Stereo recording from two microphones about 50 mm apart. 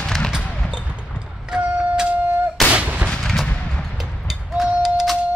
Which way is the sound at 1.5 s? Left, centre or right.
Centre.